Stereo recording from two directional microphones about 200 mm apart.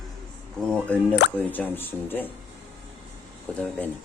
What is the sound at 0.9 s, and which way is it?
Speech, 5° left (ahead or behind).